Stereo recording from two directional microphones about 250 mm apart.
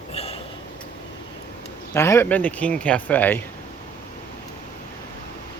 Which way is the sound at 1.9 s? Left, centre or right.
Centre.